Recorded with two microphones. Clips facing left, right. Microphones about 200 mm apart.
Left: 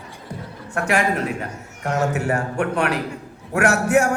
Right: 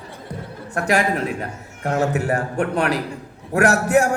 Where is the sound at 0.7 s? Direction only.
35° right (ahead or behind).